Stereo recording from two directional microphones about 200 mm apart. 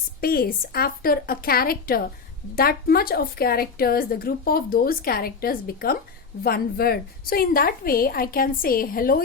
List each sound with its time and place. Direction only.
0.2 s a woman's voice: 50° left (ahead or behind)